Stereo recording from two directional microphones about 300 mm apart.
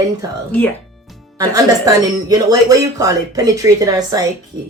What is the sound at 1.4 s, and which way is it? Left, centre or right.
Speech, centre.